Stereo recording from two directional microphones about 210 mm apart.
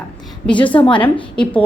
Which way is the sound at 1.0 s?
5° left (ahead or behind).